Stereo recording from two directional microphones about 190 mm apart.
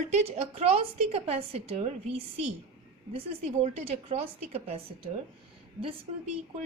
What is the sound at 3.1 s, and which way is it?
A woman's voice, 35° right (ahead or behind).